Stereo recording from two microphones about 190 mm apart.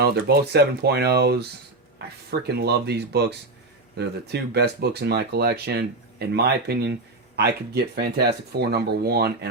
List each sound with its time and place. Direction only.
0.0 s speech: 55° right (ahead or behind)
2.6 s speech: 60° right (ahead or behind)